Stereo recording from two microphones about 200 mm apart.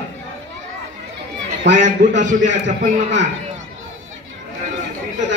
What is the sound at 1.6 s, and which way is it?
Speech, 60° right (ahead or behind).